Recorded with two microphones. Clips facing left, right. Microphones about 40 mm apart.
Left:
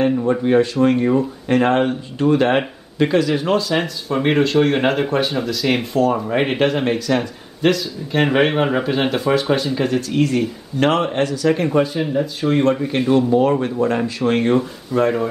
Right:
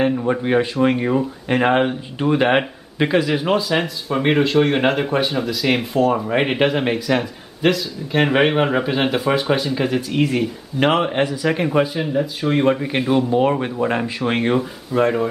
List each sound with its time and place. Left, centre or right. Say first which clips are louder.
0.3 s speech: left 2 dB; centre
13.3 s speech: left 2 dB; right; by 15.2 s centre